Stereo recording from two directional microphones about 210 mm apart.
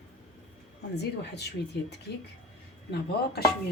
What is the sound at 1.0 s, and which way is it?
Speech, 50° left (ahead or behind).